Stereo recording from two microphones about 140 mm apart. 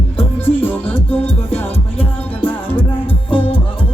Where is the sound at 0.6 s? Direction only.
10° left (ahead or behind).